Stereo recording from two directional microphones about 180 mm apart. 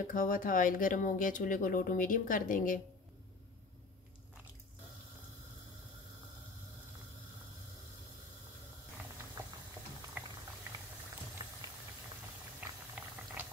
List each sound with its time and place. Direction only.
0.1 s speech: 50° left (ahead or behind)
10.2 s boiling: 10° right (ahead or behind)
12.5 s boiling: 10° right (ahead or behind)